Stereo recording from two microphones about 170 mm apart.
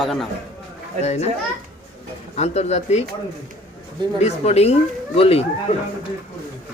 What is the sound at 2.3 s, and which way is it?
Speech, 40° left (ahead or behind).